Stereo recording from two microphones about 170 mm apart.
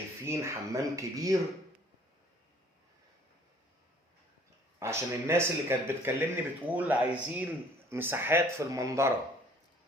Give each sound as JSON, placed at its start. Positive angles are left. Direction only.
{"t": 0.3, "sound": "speech", "side_deg": -15}
{"t": 4.8, "sound": "speech", "side_deg": -15}